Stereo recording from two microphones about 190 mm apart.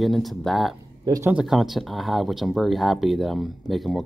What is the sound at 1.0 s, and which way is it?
Speech, 20° right (ahead or behind).